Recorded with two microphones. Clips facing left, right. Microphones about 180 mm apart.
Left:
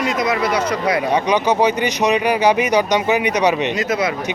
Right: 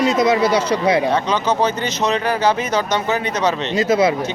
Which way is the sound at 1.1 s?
15° left (ahead or behind).